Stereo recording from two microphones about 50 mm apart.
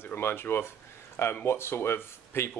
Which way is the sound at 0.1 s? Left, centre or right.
Left.